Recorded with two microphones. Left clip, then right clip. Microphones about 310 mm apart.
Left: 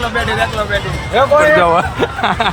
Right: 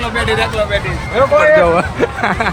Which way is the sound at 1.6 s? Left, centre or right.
Centre.